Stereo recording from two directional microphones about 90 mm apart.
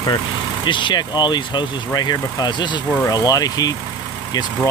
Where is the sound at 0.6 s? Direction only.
60° left (ahead or behind).